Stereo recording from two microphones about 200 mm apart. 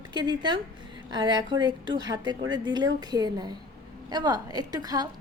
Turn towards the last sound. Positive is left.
turn(degrees=-20)  # may be behind; listen again after turning